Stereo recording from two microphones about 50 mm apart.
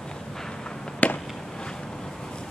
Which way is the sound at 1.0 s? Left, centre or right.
Left.